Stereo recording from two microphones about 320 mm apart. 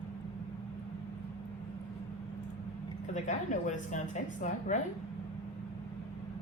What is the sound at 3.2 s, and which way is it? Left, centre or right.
A woman's voice, left.